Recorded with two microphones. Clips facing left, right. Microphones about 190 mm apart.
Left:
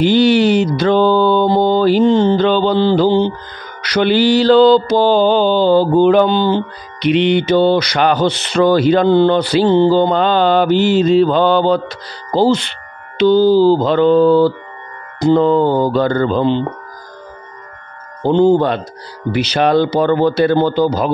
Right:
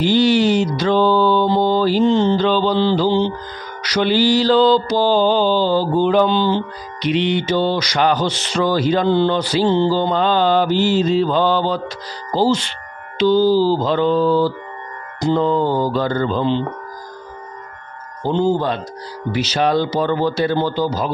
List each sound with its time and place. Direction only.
0.0 s mantra: 60° left (ahead or behind)
12.3 s speech: 60° left (ahead or behind)
13.2 s mantra: 60° left (ahead or behind)
18.2 s mantra: 60° left (ahead or behind)